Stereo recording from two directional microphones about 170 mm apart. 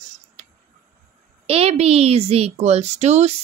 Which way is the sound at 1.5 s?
35° right (ahead or behind).